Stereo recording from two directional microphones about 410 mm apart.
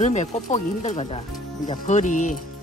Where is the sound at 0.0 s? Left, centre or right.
Centre.